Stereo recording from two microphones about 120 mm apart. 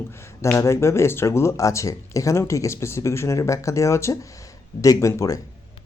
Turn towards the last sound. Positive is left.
turn(degrees=30)  # may be behind; listen again after turning